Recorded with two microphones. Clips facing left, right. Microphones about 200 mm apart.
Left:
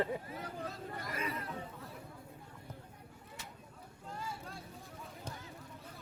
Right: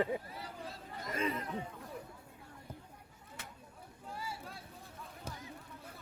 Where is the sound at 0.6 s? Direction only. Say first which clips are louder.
Left 2 dB; 30° right (ahead or behind).